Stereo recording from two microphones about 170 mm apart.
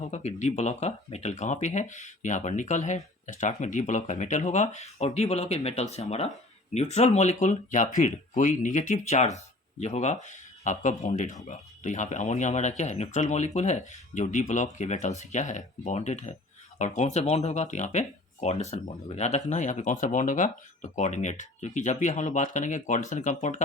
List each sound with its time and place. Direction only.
0.0 s speech: 40° left (ahead or behind)